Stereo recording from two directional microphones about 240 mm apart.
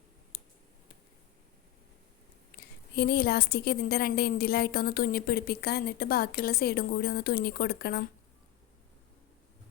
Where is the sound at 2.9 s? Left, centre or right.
Left.